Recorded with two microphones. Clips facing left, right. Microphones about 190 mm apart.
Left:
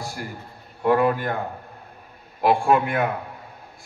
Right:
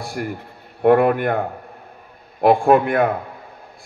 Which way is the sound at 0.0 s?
60° right (ahead or behind).